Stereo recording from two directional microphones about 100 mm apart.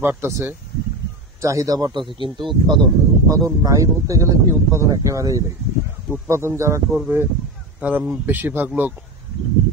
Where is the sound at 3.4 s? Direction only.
35° right (ahead or behind); by 8.9 s 20° right (ahead or behind).